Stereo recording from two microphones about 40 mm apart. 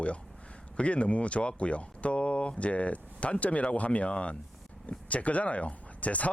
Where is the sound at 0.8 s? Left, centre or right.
Left.